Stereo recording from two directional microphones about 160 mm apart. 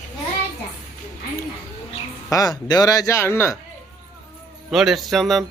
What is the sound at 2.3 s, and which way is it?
Speech, 25° left (ahead or behind).